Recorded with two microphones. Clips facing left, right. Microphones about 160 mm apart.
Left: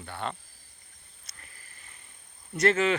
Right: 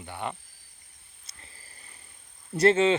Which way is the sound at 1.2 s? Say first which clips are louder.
Right 1 dB; 25° right (ahead or behind).